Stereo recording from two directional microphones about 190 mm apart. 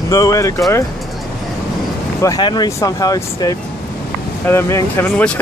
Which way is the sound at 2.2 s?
20° left (ahead or behind).